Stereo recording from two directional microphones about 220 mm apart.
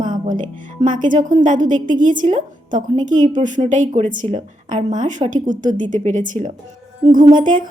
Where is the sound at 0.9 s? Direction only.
35° right (ahead or behind).